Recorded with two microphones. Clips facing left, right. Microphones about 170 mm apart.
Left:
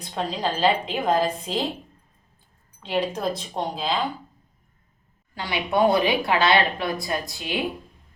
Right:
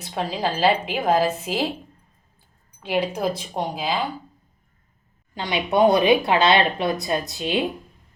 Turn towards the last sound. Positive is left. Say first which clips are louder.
# right 4 dB
turn(degrees=-20)  # may be behind; listen again after turning